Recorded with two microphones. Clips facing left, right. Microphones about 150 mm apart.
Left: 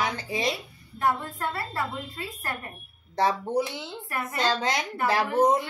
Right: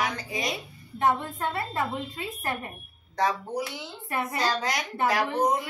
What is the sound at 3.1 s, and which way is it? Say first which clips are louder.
Speech: left 3 dB; 30° left (ahead or behind).